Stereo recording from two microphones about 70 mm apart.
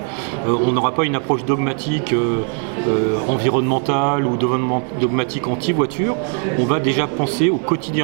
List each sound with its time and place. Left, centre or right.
0.4 s speech: centre